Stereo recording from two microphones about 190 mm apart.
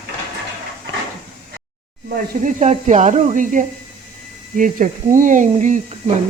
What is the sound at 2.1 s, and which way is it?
Speech, 40° right (ahead or behind).